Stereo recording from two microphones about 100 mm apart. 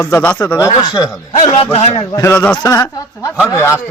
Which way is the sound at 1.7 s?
90° left.